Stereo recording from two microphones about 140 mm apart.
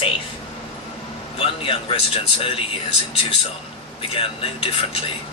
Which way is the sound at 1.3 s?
40° left (ahead or behind).